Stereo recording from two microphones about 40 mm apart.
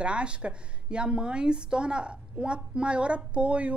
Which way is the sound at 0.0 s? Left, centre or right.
Right.